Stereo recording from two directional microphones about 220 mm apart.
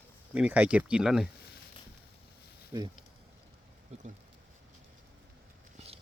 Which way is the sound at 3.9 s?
30° right (ahead or behind).